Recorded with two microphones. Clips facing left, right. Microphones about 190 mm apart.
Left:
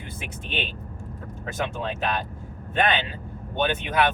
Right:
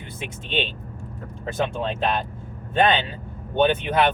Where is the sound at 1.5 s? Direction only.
30° right (ahead or behind).